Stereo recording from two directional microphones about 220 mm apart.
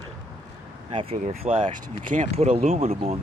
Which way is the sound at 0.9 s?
25° right (ahead or behind).